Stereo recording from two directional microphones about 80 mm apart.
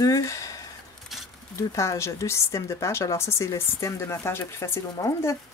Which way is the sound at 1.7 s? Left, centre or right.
Left.